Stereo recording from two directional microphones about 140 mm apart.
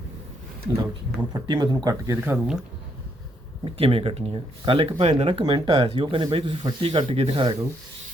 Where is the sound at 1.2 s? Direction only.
30° right (ahead or behind).